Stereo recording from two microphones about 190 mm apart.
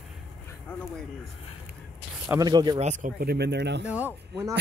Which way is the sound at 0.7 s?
10° left (ahead or behind).